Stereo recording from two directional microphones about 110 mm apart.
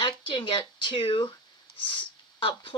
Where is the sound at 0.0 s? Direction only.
50° left (ahead or behind).